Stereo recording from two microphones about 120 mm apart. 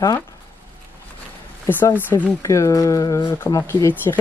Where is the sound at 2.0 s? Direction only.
15° left (ahead or behind).